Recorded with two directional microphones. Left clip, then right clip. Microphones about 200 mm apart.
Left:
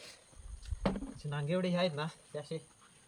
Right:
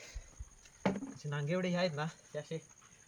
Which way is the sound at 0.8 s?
10° right (ahead or behind).